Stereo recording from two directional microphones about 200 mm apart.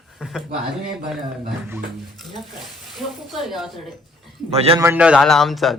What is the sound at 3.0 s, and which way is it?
Speech, centre (ahead or behind).